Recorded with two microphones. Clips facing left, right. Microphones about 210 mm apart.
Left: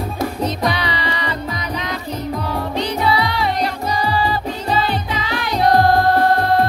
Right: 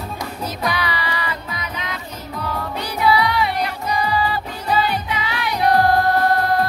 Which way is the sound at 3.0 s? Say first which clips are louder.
Right 4 dB; 30° left (ahead or behind).